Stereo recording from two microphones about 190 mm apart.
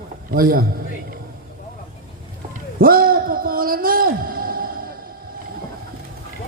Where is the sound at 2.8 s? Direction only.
50° right (ahead or behind).